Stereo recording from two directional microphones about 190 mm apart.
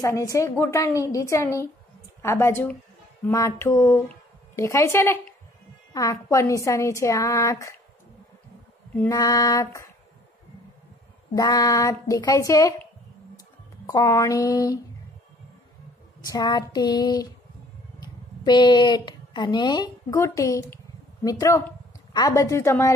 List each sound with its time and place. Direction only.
0.0 s a woman's voice: 15° left (ahead or behind)
8.9 s a woman's voice: 15° left (ahead or behind)
11.3 s a woman's voice: 20° left (ahead or behind)
13.8 s a woman's voice: 20° left (ahead or behind)
16.3 s a woman's voice: 20° left (ahead or behind)